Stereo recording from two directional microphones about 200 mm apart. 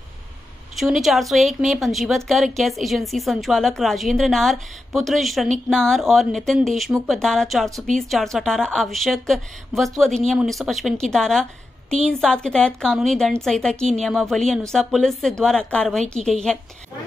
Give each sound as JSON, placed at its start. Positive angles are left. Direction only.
{"t": 0.7, "sound": "a woman's voice", "side_deg": 0}